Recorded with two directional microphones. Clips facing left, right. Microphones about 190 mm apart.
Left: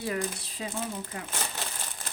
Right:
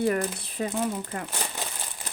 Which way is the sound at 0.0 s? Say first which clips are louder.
Right 6 dB; 55° right (ahead or behind).